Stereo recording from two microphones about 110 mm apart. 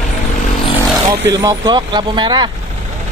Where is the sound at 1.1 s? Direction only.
35° right (ahead or behind).